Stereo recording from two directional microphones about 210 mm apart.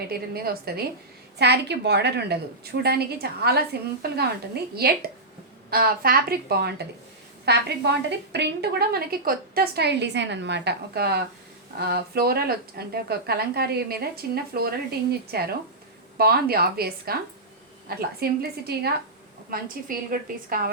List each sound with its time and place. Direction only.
0.1 s a woman's voice: 45° right (ahead or behind)